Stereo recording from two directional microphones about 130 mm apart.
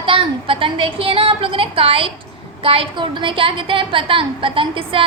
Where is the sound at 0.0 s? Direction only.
40° right (ahead or behind).